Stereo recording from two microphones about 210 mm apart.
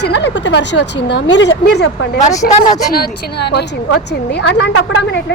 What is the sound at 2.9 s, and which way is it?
A woman's voice, 50° left (ahead or behind).